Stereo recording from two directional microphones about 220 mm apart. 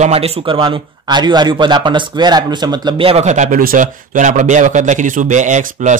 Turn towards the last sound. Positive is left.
turn(degrees=-35)  # may be behind; listen again after turning